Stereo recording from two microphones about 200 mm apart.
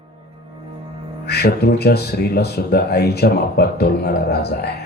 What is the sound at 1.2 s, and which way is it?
Speech, 55° left (ahead or behind).